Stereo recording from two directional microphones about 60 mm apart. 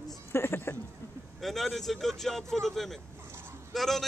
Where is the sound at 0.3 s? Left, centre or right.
Left.